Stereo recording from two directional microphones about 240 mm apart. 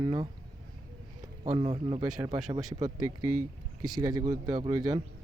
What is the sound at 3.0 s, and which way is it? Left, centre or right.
Speech, right.